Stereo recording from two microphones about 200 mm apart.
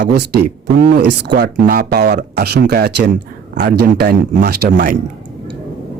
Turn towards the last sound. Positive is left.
turn(degrees=-55)  # may be behind; listen again after turning